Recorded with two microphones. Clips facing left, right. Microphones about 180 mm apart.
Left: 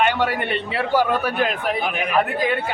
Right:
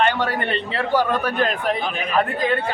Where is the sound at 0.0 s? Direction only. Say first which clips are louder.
Even; 10° left (ahead or behind).